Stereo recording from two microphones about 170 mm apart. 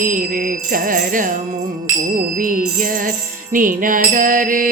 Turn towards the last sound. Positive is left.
turn(degrees=-50)  # may be behind; listen again after turning